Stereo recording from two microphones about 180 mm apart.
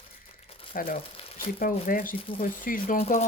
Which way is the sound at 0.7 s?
50° left (ahead or behind).